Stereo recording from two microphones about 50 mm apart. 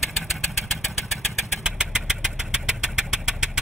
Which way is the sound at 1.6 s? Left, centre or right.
Centre.